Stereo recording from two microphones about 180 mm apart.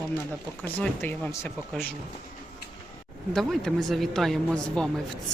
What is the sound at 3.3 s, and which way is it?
Speech, centre (ahead or behind).